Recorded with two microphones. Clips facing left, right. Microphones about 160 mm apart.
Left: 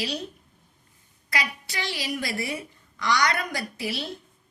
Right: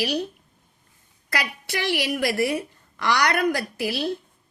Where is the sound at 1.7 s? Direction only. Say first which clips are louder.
Right 8 dB; 65° right (ahead or behind).